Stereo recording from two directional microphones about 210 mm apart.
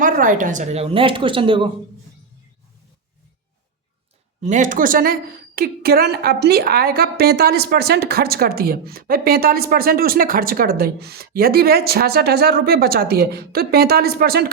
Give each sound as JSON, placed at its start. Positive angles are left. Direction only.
{"t": 0.0, "sound": "a woman's voice", "side_deg": -40}
{"t": 4.4, "sound": "a woman's voice", "side_deg": -35}